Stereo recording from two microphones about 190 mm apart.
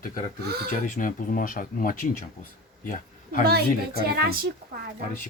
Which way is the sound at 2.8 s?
45° left (ahead or behind).